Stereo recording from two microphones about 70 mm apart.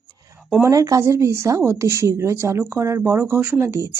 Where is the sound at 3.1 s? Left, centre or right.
Right.